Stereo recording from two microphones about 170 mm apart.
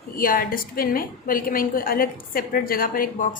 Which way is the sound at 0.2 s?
55° left (ahead or behind).